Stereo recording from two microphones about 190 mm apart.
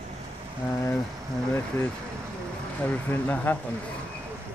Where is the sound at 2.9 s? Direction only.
10° left (ahead or behind).